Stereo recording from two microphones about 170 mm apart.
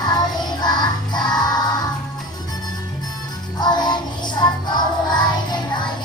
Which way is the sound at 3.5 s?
25° left (ahead or behind).